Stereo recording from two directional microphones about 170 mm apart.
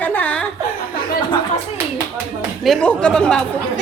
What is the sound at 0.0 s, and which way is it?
Chuckle, 10° left (ahead or behind).